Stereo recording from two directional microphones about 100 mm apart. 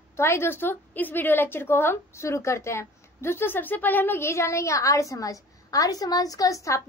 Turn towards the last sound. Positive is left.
turn(degrees=35)  # may be behind; listen again after turning